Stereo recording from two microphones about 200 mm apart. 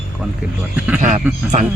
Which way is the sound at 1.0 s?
40° right (ahead or behind).